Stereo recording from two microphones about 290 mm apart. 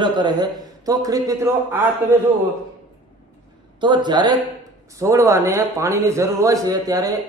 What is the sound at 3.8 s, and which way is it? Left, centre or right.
A woman's voice, centre.